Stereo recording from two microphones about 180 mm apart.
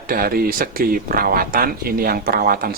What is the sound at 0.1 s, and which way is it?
Speech, 55° right (ahead or behind).